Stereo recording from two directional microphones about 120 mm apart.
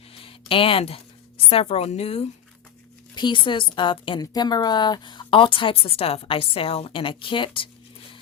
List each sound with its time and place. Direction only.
0.1 s a sound: 50° left (ahead or behind)
1.5 s a woman's voice: 55° left (ahead or behind)
3.2 s a woman's voice: 40° left (ahead or behind)